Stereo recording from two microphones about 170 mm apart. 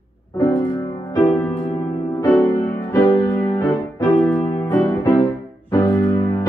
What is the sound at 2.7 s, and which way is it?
Music, 20° left (ahead or behind).